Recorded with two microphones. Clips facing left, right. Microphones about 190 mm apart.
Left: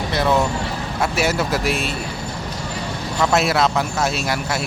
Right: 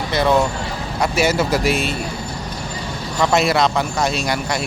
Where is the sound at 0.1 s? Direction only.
Centre (ahead or behind).